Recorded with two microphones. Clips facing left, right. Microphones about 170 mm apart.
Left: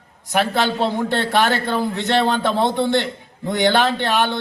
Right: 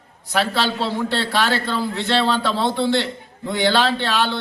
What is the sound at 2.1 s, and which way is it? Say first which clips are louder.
Speech: left 1 dB; 50° left (ahead or behind).